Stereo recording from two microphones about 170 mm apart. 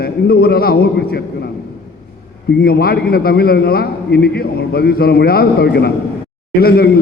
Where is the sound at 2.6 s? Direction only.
65° left (ahead or behind).